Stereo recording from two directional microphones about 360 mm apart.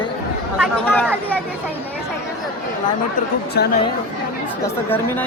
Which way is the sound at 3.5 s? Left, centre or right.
Left.